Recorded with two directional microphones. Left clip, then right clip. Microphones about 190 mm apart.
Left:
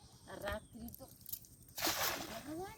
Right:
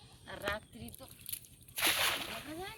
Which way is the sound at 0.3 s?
5° left (ahead or behind).